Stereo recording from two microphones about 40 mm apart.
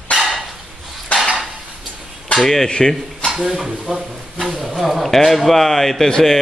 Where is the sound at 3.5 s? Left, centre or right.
Centre.